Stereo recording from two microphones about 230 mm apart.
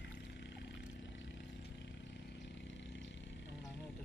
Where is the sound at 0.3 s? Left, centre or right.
Left.